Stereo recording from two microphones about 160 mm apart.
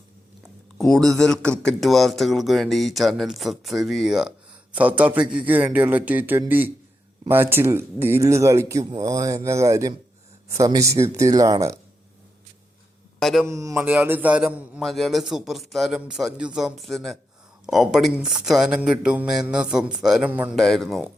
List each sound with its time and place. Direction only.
0.4 s speech: centre (ahead or behind); by 11.8 s 20° right (ahead or behind)
13.1 s a man's voice: centre (ahead or behind)
13.5 s speech: 20° right (ahead or behind)
20.6 s speech: centre (ahead or behind)